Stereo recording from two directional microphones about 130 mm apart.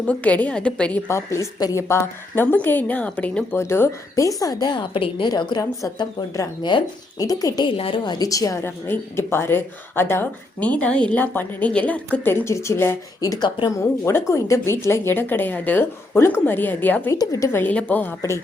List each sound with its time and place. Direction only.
0.0 s a woman's voice: 10° left (ahead or behind); by 7.7 s 30° left (ahead or behind)
7.8 s a woman's voice: 40° left (ahead or behind); by 17.2 s 15° left (ahead or behind)
17.2 s a woman's voice: 25° left (ahead or behind)